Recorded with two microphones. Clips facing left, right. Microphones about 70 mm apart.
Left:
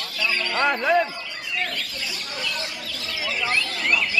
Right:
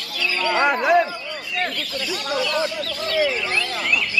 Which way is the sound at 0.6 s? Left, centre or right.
Centre.